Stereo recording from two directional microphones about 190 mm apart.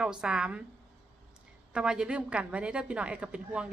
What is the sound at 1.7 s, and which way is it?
A woman's voice, 5° right (ahead or behind).